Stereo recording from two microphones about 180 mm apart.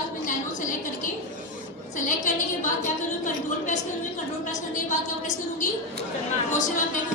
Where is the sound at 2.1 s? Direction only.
45° left (ahead or behind).